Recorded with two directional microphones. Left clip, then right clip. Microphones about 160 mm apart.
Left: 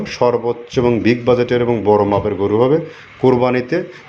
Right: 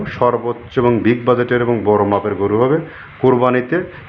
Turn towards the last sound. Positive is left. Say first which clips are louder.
# right 1 dB
turn(degrees=5)  # may be behind; listen again after turning